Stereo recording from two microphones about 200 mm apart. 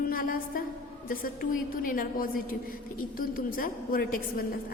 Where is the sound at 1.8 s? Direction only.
45° left (ahead or behind).